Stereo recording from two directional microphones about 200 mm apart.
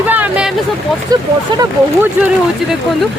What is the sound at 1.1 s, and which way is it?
Speech, 20° right (ahead or behind).